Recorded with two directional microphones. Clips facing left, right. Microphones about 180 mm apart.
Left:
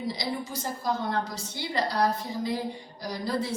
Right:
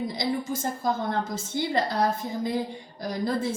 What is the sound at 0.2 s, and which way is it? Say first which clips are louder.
A woman's voice: right 5 dB; 50° right (ahead or behind).